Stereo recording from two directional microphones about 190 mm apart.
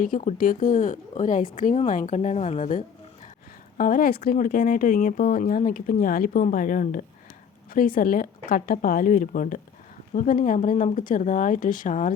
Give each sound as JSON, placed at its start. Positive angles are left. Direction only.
{"t": 0.0, "sound": "a woman's voice", "side_deg": 45}